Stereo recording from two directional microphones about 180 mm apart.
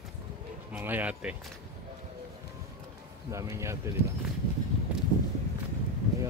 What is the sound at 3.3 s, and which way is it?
Speech, 15° right (ahead or behind).